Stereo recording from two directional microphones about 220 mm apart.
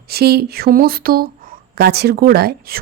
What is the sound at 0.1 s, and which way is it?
Speech, 45° right (ahead or behind).